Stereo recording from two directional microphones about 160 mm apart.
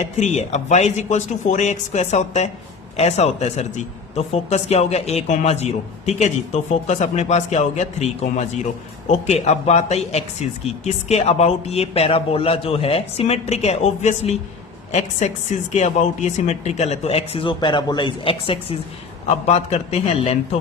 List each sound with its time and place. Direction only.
0.0 s speech: 45° left (ahead or behind)